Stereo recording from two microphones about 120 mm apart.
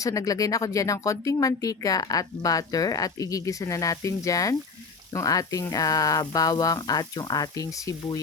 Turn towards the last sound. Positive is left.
turn(degrees=25)  # may be behind; listen again after turning